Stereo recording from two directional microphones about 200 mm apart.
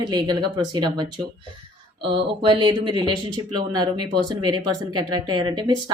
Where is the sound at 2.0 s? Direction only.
25° right (ahead or behind).